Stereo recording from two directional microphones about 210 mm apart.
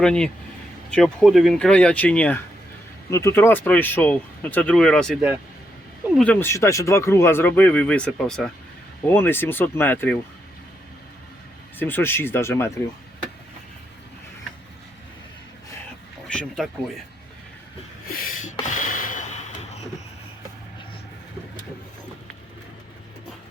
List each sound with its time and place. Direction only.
0.0 s speech: 5° left (ahead or behind)
6.1 s speech: 5° left (ahead or behind)
11.8 s speech: 10° left (ahead or behind)
16.3 s speech: 5° left (ahead or behind)
18.1 s a sound: 40° left (ahead or behind)